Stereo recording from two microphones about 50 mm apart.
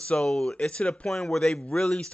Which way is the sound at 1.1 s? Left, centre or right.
Centre.